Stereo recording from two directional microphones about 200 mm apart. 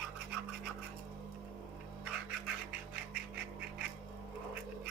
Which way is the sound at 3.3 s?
5° right (ahead or behind).